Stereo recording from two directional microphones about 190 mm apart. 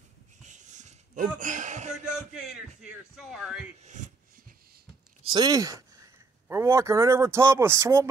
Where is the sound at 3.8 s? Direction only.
40° right (ahead or behind).